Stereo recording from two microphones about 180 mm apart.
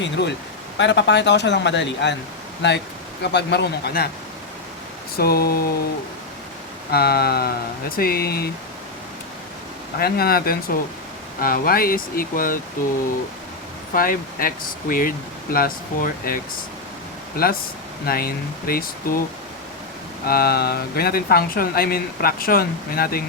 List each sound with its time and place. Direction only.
0.0 s speech: 75° left (ahead or behind)
5.1 s speech: 60° left (ahead or behind)
6.9 s speech: 60° left (ahead or behind)
10.0 s speech: 60° left (ahead or behind)
13.9 s speech: 50° left (ahead or behind)
20.2 s speech: 60° left (ahead or behind)